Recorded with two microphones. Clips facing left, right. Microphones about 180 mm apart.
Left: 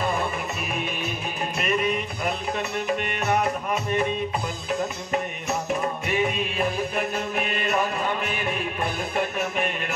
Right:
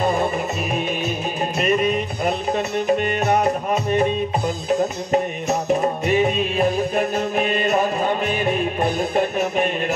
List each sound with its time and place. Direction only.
1.6 s music: 25° right (ahead or behind)
5.1 s music: 35° right (ahead or behind)